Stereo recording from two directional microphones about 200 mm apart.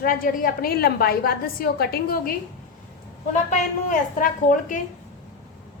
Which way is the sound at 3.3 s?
40° left (ahead or behind).